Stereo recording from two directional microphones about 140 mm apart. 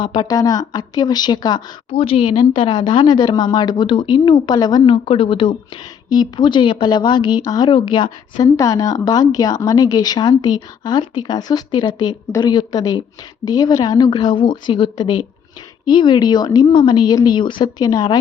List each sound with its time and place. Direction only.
0.0 s speech: 35° left (ahead or behind)
1.9 s a woman's voice: 40° left (ahead or behind)